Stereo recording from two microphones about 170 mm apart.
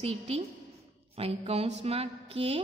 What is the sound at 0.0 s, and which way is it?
A woman's voice, 40° right (ahead or behind).